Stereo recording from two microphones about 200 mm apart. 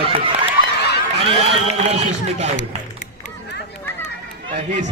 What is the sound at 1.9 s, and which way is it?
Speech, 35° right (ahead or behind).